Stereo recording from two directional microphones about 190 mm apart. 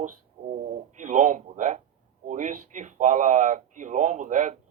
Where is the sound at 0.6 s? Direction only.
40° right (ahead or behind).